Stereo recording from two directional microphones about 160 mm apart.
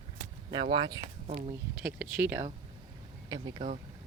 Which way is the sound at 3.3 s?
30° right (ahead or behind).